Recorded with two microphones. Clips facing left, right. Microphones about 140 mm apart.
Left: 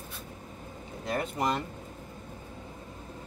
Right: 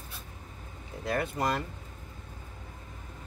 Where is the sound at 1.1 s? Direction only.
20° left (ahead or behind).